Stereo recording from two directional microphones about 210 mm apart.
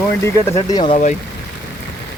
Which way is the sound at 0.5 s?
25° left (ahead or behind).